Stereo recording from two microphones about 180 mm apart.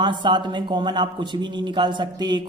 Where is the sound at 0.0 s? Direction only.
25° right (ahead or behind).